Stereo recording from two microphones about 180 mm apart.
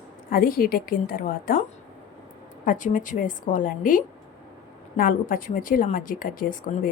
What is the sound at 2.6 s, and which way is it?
Speech, 45° left (ahead or behind).